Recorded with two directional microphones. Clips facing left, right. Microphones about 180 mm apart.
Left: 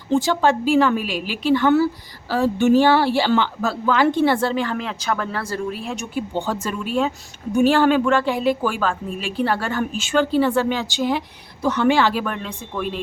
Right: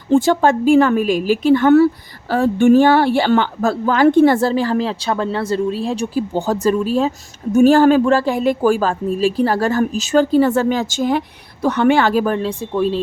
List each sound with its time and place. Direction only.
0.1 s a woman's voice: 50° right (ahead or behind)
11.6 s speech: 60° right (ahead or behind); by 13.0 s 30° right (ahead or behind)